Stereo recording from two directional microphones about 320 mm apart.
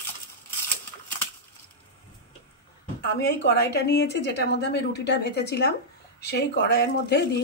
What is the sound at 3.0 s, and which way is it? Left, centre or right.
A woman's voice, left.